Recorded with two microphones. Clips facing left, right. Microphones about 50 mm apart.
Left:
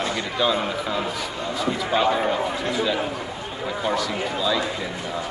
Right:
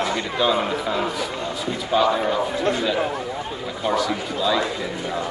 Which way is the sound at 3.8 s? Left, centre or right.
Centre.